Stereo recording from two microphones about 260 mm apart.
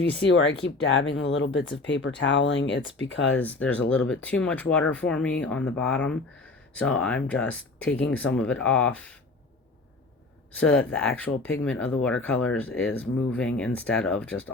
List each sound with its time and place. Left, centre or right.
0.3 s speech: left
3.3 s speech: centre
10.5 s speech: centre